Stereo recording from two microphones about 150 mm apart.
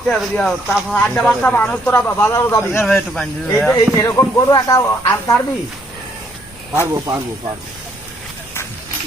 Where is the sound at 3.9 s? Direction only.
20° left (ahead or behind).